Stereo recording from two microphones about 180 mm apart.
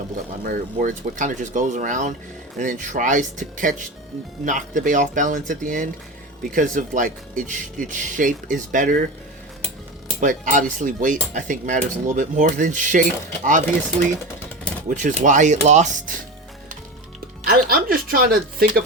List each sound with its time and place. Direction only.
0.4 s cutlery: 50° right (ahead or behind)
10.2 s cutlery: 45° right (ahead or behind)
14.8 s cutlery: 45° right (ahead or behind)
17.4 s speech: 55° right (ahead or behind)